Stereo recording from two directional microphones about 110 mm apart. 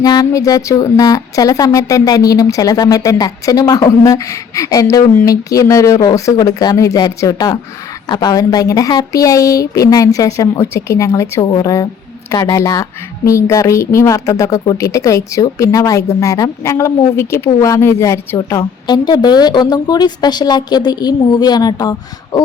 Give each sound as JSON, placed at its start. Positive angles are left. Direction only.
{"t": 0.0, "sound": "a woman's voice", "side_deg": 35}